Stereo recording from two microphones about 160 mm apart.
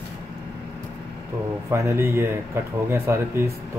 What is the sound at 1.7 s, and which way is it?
Speech, 15° right (ahead or behind).